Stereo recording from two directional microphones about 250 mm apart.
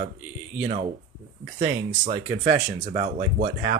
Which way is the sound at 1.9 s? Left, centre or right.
Right.